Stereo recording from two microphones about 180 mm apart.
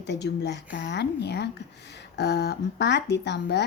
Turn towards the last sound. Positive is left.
turn(degrees=70)  # may be behind; listen again after turning